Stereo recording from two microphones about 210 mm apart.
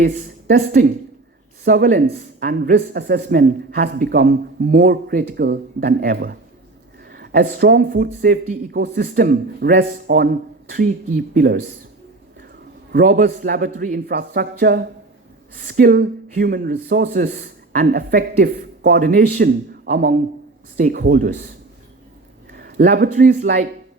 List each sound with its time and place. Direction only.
0.0 s a sound: 35° right (ahead or behind)
0.7 s a man's voice: 40° right (ahead or behind)
5.8 s a man's voice: 35° right (ahead or behind)
12.9 s a man's voice: 40° right (ahead or behind)
17.1 s a man's voice: 35° right (ahead or behind)
17.3 s a man's voice: 45° right (ahead or behind)
22.5 s speech: 45° right (ahead or behind)